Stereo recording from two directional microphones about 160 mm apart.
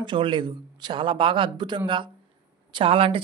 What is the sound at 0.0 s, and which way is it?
Speech, 30° right (ahead or behind).